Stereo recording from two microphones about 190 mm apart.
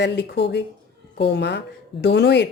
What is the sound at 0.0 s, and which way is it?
Speech, 65° left (ahead or behind).